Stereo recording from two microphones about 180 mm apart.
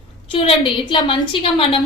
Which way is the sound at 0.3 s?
30° left (ahead or behind).